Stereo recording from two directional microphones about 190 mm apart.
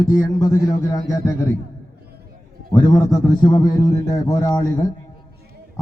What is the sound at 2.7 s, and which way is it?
A man's voice, 20° left (ahead or behind).